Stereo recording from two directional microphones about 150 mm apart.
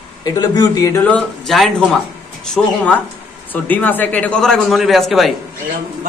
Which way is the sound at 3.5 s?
10° left (ahead or behind).